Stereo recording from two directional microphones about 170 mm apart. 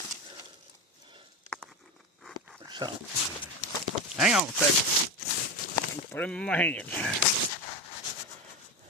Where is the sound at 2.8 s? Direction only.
25° right (ahead or behind).